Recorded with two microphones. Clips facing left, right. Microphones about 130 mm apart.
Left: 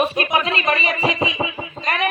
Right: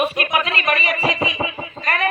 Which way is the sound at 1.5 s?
20° left (ahead or behind).